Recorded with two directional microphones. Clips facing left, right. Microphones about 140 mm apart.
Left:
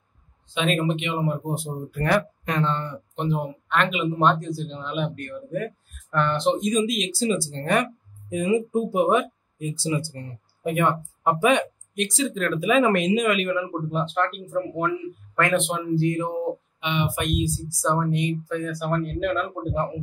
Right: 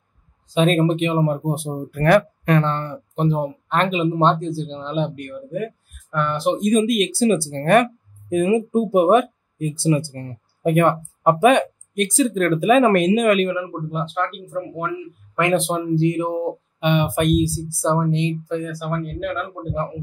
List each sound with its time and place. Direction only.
0.5 s speech: 40° right (ahead or behind); by 3.0 s 55° right (ahead or behind)
3.2 s speech: 35° right (ahead or behind)
5.1 s speech: 15° right (ahead or behind)
6.6 s speech: 55° right (ahead or behind)
13.6 s speech: 5° right (ahead or behind)
15.5 s speech: 35° right (ahead or behind)
16.8 s speech: 50° right (ahead or behind); by 18.7 s 20° right (ahead or behind)
18.7 s speech: centre (ahead or behind)